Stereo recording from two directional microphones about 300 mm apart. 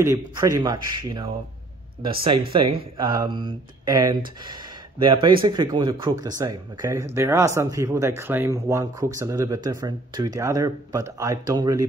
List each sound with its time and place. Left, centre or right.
0.0 s speech: centre